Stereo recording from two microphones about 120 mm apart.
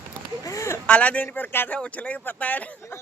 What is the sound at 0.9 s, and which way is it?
Speech, 10° left (ahead or behind).